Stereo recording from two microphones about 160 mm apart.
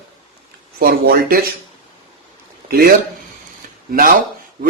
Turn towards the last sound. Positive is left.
turn(degrees=-65)  # may be behind; listen again after turning